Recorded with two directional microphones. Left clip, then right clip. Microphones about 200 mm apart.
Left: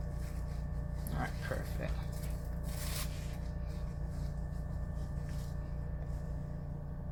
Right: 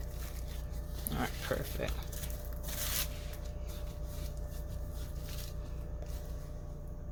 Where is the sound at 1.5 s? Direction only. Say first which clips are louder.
Right 7 dB; 55° right (ahead or behind).